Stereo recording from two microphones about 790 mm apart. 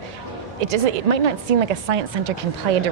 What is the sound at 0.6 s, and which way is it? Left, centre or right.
A woman's voice, right.